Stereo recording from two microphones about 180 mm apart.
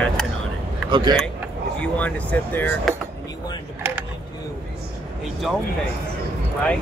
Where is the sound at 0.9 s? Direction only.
25° right (ahead or behind).